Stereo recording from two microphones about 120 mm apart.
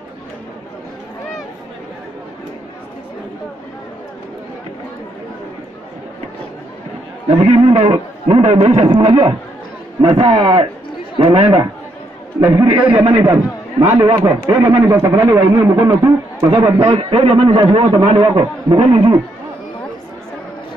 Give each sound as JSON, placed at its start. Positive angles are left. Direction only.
{"t": 7.2, "sound": "speech", "side_deg": -60}
{"t": 12.4, "sound": "a man's voice", "side_deg": -25}
{"t": 12.7, "sound": "a man's voice", "side_deg": -10}
{"t": 13.1, "sound": "a man's voice", "side_deg": -30}
{"t": 16.5, "sound": "speech", "side_deg": -40}
{"t": 16.8, "sound": "a man's voice", "side_deg": -50}